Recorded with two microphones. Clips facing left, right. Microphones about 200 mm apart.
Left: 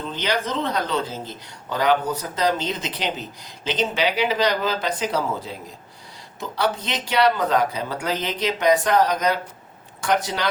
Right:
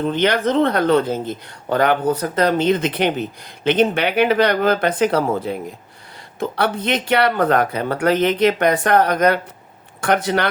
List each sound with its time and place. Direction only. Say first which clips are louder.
0.0 s speech: right 8 dB; 60° right (ahead or behind)